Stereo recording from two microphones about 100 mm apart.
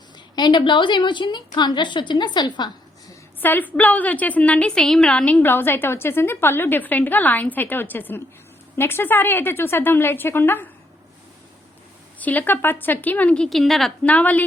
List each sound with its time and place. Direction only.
0.3 s a woman's voice: 50° left (ahead or behind)
3.4 s a woman's voice: 20° left (ahead or behind)
12.2 s a woman's voice: 15° left (ahead or behind); by 13.9 s centre (ahead or behind)
14.0 s a woman's voice: 15° left (ahead or behind)